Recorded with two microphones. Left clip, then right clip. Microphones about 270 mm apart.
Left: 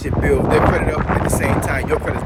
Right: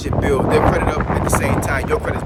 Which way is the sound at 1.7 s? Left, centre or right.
Centre.